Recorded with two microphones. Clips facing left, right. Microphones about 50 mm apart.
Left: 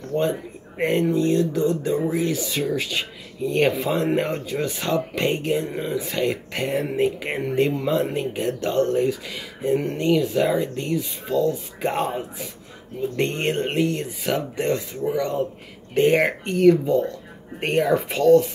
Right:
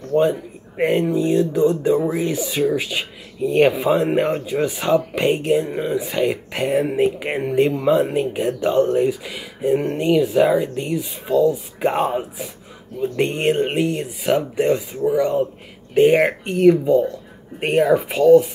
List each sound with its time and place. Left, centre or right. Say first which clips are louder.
0.2 s speech: right 4 dB; centre